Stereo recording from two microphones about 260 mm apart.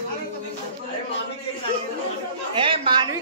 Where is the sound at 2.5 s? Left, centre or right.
Right.